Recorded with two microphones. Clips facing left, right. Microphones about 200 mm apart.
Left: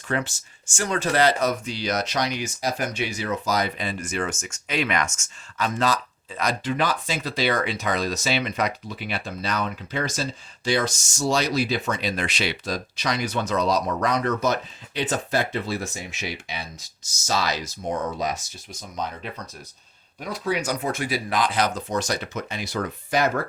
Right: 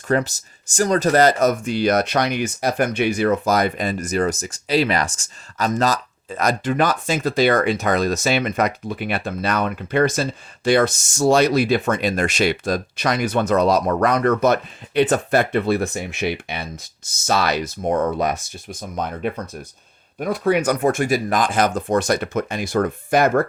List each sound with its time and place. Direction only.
0.1 s speech: 40° right (ahead or behind)